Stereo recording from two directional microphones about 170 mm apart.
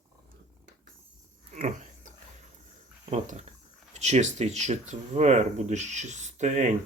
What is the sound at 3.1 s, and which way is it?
Speech, 45° right (ahead or behind).